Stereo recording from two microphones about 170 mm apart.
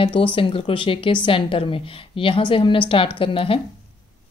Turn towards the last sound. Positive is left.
turn(degrees=30)  # may be behind; listen again after turning